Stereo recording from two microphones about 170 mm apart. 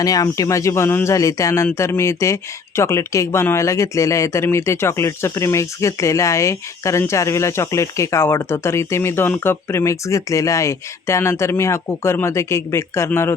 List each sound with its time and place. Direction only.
0.0 s speech: 20° left (ahead or behind)